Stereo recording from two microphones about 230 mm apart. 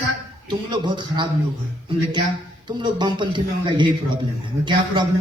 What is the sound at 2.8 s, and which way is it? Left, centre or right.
A man's voice, centre.